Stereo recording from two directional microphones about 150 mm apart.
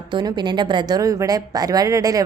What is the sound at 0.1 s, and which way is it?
A woman's voice, 30° right (ahead or behind).